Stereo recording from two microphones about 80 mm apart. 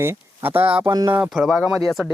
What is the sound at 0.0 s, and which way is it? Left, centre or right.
Speech, right.